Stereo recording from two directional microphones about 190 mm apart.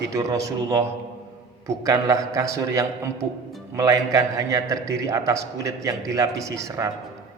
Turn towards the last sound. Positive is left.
turn(degrees=-15)  # may be behind; listen again after turning